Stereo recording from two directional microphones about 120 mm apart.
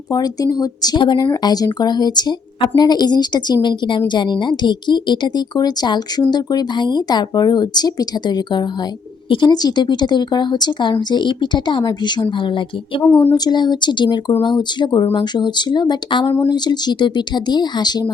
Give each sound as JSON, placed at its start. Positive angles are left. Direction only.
{"t": 0.1, "sound": "a woman's voice", "side_deg": 30}
{"t": 13.0, "sound": "speech", "side_deg": 15}
{"t": 13.3, "sound": "a woman's voice", "side_deg": 35}